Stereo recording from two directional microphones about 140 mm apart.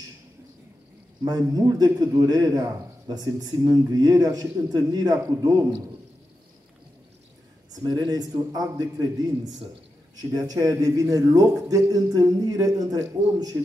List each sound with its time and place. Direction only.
1.2 s speech: 30° right (ahead or behind)
7.7 s speech: 30° right (ahead or behind)